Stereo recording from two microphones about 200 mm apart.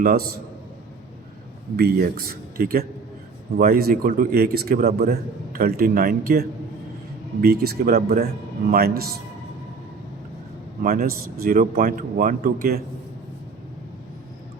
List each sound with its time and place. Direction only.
0.0 s a man's voice: 50° right (ahead or behind)
1.7 s a man's voice: 50° right (ahead or behind)
7.4 s a man's voice: 50° right (ahead or behind)
10.8 s a man's voice: 45° right (ahead or behind)